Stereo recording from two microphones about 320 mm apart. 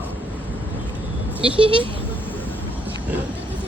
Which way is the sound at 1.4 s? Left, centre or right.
Centre.